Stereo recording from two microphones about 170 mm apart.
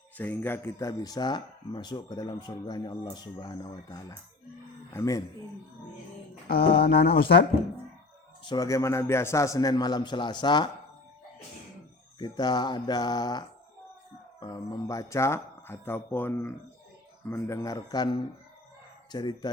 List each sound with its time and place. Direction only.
0.2 s speech: 10° left (ahead or behind)
6.7 s speech: 70° left (ahead or behind)
8.4 s speech: 20° left (ahead or behind)
12.2 s speech: 25° left (ahead or behind)